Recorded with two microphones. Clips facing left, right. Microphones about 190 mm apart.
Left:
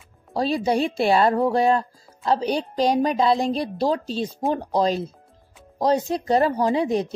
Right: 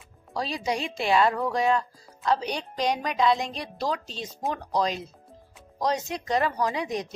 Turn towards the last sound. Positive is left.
turn(degrees=30)  # may be behind; listen again after turning